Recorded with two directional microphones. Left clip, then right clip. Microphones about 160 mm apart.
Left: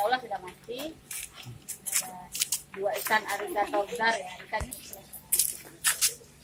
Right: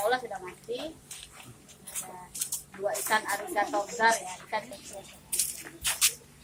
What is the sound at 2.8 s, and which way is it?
Speech, 30° left (ahead or behind).